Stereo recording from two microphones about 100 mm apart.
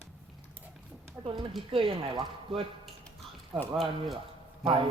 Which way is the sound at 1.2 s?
60° right (ahead or behind).